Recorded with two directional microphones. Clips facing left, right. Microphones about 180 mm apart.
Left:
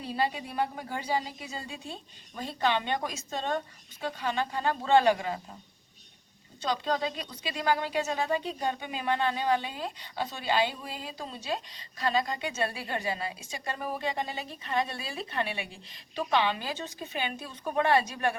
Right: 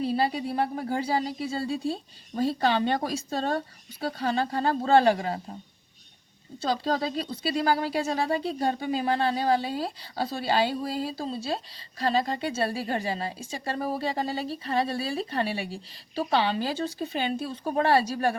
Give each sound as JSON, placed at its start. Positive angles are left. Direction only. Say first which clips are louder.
{"t": 0.0, "sound": "speech", "louder": "right 5 dB", "side_deg": -30}
{"t": 6.6, "sound": "speech", "louder": "right 3 dB", "side_deg": -35}